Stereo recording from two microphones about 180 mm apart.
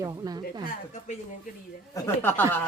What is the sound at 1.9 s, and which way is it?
Speech, 15° left (ahead or behind).